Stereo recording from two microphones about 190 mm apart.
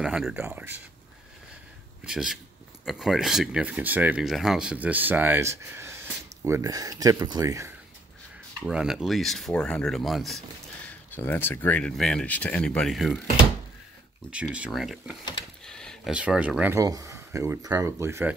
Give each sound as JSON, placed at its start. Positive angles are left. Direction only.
{"t": 0.0, "sound": "speech", "side_deg": -5}
{"t": 2.0, "sound": "speech", "side_deg": -5}
{"t": 8.6, "sound": "speech", "side_deg": -5}
{"t": 11.1, "sound": "speech", "side_deg": 10}
{"t": 14.3, "sound": "speech", "side_deg": -5}